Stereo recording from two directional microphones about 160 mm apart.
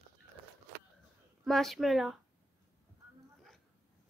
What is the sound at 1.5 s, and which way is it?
Speech, centre (ahead or behind).